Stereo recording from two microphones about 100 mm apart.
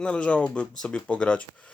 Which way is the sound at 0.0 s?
10° left (ahead or behind).